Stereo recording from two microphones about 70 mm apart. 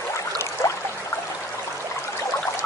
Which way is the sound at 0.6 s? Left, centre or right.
Left.